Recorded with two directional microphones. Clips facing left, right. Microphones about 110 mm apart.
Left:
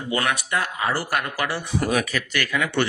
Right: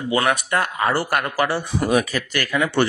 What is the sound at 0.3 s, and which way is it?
Speech, 55° right (ahead or behind).